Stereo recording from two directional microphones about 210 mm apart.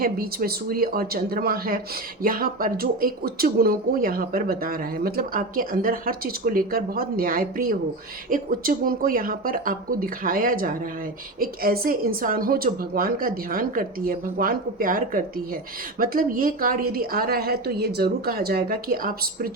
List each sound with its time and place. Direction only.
0.0 s speech: 45° right (ahead or behind)